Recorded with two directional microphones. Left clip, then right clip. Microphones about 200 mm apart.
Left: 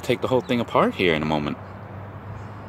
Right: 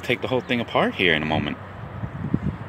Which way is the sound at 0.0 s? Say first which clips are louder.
Left 2 dB; 20° left (ahead or behind).